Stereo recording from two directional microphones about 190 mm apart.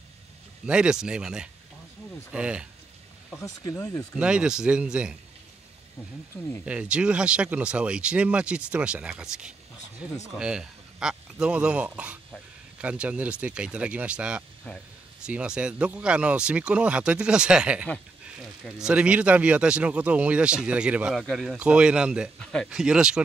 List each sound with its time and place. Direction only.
0.7 s speech: 5° right (ahead or behind)
3.4 s speech: 20° left (ahead or behind)
4.1 s speech: 5° right (ahead or behind)
6.6 s speech: 5° right (ahead or behind)